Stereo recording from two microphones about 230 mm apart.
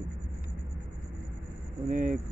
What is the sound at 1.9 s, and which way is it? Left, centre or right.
Speech, right.